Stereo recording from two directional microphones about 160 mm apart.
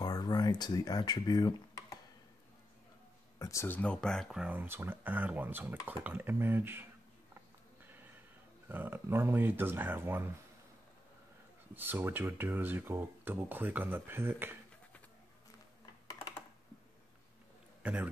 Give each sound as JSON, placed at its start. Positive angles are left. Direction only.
{"t": 0.0, "sound": "speech", "side_deg": 25}
{"t": 3.3, "sound": "speech", "side_deg": 20}
{"t": 8.6, "sound": "speech", "side_deg": -10}
{"t": 11.7, "sound": "speech", "side_deg": -10}
{"t": 17.8, "sound": "speech", "side_deg": -10}